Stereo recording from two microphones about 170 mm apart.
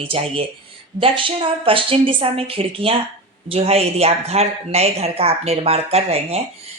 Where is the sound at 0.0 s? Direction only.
30° right (ahead or behind).